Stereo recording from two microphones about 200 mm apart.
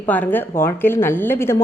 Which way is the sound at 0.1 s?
10° left (ahead or behind).